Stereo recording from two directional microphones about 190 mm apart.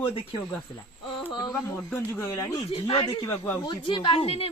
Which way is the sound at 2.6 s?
30° left (ahead or behind).